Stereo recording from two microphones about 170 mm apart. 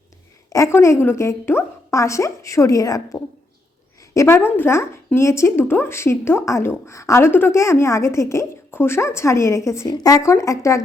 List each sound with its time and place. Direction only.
0.5 s a woman's voice: 15° left (ahead or behind)